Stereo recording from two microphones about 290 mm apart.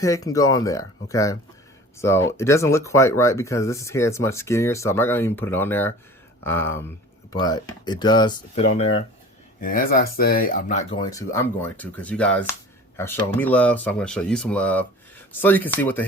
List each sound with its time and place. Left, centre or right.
0.0 s speech: centre